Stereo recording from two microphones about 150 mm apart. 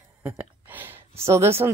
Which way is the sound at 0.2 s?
10° right (ahead or behind).